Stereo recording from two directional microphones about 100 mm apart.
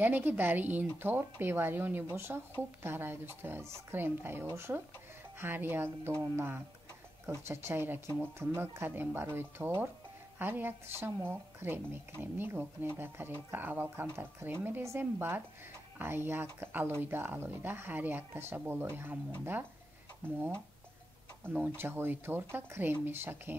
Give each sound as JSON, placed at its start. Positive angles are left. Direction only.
{"t": 0.0, "sound": "speech", "side_deg": -20}
{"t": 21.5, "sound": "speech", "side_deg": -20}